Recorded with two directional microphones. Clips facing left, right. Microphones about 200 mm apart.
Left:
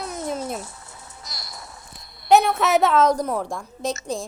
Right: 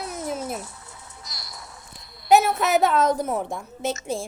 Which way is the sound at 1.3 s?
45° left (ahead or behind).